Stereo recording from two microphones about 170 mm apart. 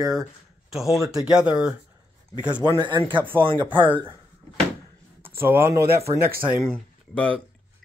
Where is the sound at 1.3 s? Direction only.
5° right (ahead or behind).